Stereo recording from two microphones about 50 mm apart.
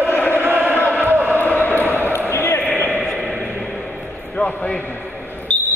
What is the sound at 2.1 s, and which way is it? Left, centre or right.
Basketball bounce, left.